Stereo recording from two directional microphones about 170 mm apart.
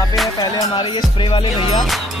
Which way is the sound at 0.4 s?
25° left (ahead or behind).